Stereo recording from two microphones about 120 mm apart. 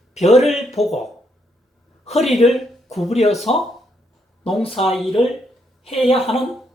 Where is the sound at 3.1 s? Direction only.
65° left (ahead or behind).